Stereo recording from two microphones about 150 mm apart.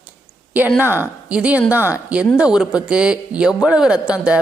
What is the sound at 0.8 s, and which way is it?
A man's voice, 15° right (ahead or behind).